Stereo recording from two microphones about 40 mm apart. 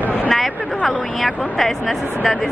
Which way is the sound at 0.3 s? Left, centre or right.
Centre.